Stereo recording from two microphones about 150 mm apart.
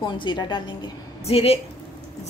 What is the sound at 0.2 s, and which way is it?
A woman's voice, 30° left (ahead or behind).